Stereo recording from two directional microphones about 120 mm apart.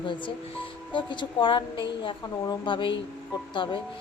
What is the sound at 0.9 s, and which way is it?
A woman's voice, 45° left (ahead or behind).